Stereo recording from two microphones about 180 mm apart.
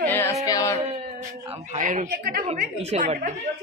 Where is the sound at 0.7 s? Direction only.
35° right (ahead or behind); by 2.4 s 55° right (ahead or behind).